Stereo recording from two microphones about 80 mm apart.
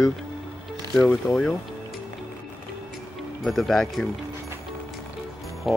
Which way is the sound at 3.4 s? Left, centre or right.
Centre.